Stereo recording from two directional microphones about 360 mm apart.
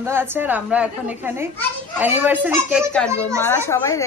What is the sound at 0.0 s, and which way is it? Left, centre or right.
A woman's voice, centre.